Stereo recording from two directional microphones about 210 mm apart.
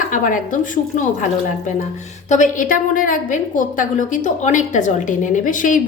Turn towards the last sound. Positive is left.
turn(degrees=40)  # may be behind; listen again after turning